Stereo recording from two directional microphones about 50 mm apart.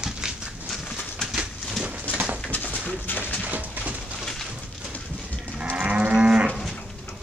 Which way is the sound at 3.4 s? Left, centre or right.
Right.